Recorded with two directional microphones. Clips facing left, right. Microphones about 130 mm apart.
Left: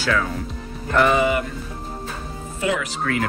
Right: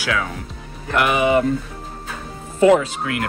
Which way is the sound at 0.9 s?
15° right (ahead or behind).